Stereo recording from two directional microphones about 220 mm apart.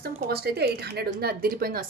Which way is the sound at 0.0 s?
45° right (ahead or behind).